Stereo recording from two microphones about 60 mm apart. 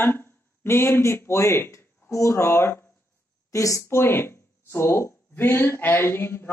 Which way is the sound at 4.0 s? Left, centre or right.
Left.